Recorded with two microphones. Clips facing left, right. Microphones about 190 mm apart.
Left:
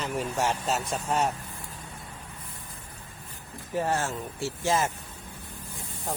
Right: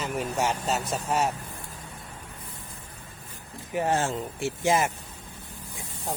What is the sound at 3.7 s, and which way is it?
Speech, 15° right (ahead or behind).